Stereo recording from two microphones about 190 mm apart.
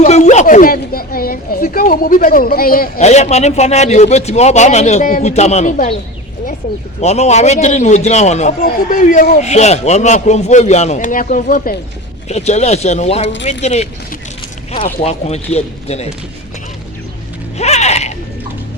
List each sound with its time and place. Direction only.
0.0 s speech: 40° left (ahead or behind)
3.0 s a man's voice: 35° left (ahead or behind)
7.0 s a man's voice: 35° left (ahead or behind)
12.3 s a man's voice: 35° left (ahead or behind)
15.0 s a man's voice: 35° left (ahead or behind)
17.6 s a sound: 35° left (ahead or behind)